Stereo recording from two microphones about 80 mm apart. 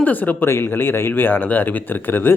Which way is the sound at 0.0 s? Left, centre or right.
Left.